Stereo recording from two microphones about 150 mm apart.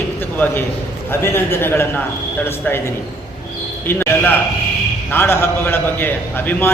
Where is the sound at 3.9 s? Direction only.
15° left (ahead or behind).